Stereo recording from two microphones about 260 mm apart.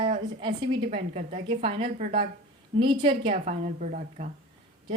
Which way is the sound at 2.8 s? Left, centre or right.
Centre.